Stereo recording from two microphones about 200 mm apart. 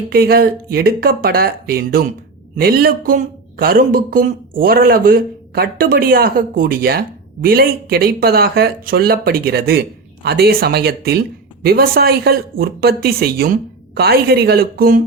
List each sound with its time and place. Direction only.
0.1 s speech: 50° right (ahead or behind)